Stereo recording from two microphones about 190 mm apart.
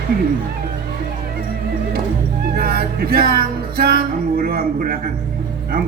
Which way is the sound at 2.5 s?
55° right (ahead or behind).